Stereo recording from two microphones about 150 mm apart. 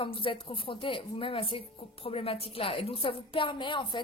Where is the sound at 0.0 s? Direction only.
35° left (ahead or behind).